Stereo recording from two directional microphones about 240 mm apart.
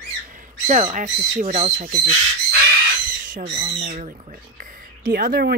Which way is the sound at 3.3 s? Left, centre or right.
Right.